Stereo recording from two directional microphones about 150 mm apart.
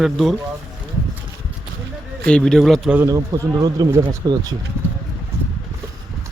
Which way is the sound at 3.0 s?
20° right (ahead or behind).